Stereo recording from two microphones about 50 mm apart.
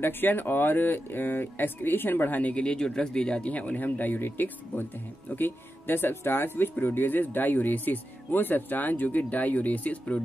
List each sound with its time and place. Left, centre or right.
0.0 s speech: left
2.5 s speech: centre